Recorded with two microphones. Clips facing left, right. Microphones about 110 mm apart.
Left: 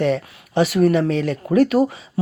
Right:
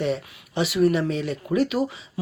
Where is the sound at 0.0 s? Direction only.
55° left (ahead or behind).